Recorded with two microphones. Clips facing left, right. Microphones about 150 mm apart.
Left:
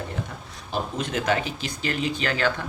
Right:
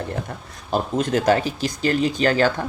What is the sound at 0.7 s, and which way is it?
Speech, 40° right (ahead or behind).